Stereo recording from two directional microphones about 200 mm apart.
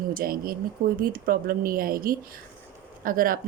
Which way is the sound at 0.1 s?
45° right (ahead or behind).